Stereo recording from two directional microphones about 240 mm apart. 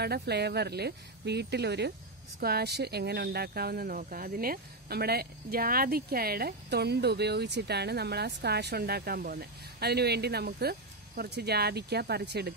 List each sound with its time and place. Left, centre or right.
0.0 s speech: right